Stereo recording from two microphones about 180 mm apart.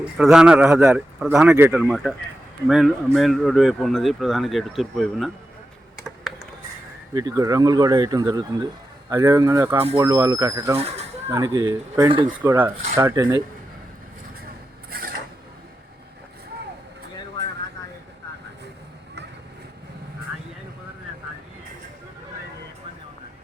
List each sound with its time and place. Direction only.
0.0 s speech: 5° right (ahead or behind)
6.0 s computer keyboard: centre (ahead or behind)
7.1 s speech: 20° right (ahead or behind)
12.4 s speech: 10° right (ahead or behind)
14.8 s a sound: 55° right (ahead or behind)